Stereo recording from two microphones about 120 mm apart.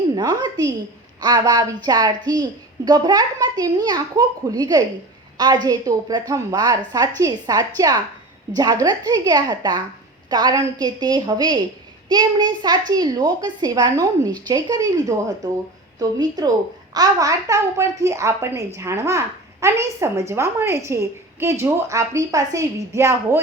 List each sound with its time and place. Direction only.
0.2 s a woman's voice: 35° right (ahead or behind)